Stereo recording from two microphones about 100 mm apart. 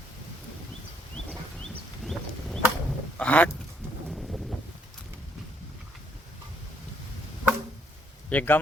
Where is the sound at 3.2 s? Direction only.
15° left (ahead or behind).